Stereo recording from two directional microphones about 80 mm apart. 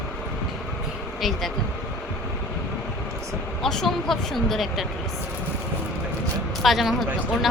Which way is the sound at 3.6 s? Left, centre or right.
Centre.